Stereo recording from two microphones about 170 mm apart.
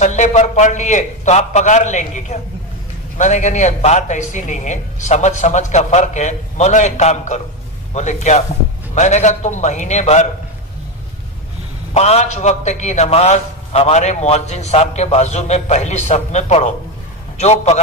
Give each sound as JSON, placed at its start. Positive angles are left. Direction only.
{"t": 0.0, "sound": "speech", "side_deg": 45}
{"t": 11.9, "sound": "a man's voice", "side_deg": 40}